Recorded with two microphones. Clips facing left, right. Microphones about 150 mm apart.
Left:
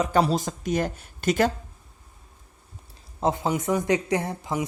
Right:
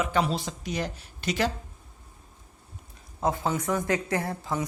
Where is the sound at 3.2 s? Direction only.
25° left (ahead or behind).